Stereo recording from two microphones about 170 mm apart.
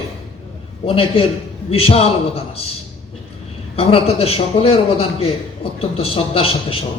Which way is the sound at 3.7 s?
35° left (ahead or behind).